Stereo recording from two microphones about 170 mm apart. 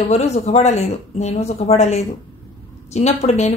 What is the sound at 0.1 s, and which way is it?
A woman's voice, 40° left (ahead or behind).